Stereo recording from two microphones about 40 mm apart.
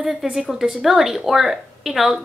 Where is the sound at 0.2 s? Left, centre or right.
Centre.